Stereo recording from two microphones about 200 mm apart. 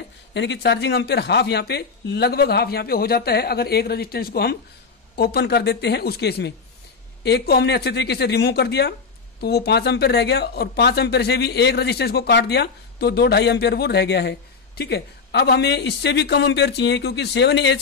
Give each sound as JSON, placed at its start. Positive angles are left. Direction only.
{"t": 0.3, "sound": "speech", "side_deg": 60}